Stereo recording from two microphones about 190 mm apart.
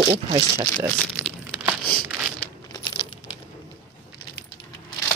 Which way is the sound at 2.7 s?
25° left (ahead or behind).